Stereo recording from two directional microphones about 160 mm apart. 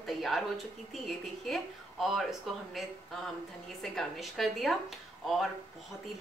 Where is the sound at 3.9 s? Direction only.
Centre (ahead or behind).